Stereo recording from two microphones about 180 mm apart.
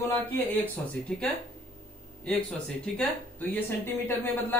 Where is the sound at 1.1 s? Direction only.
5° left (ahead or behind).